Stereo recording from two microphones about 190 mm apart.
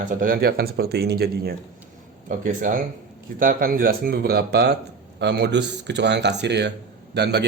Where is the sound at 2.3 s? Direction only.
45° right (ahead or behind).